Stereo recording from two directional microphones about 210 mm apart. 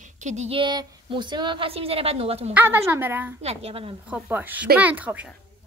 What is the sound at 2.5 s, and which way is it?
Speech, 10° right (ahead or behind).